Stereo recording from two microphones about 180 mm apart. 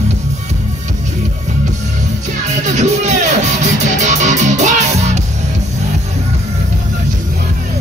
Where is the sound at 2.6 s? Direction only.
40° right (ahead or behind).